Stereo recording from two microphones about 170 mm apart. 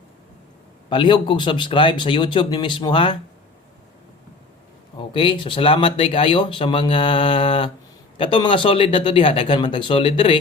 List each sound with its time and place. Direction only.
0.9 s speech: 30° left (ahead or behind)
4.9 s speech: 30° left (ahead or behind)